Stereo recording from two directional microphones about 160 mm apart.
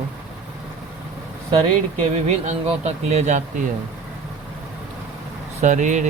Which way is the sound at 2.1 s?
45° right (ahead or behind).